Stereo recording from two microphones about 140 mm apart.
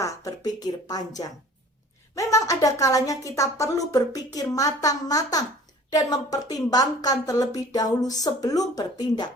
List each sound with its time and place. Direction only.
0.0 s a woman's voice: 25° left (ahead or behind)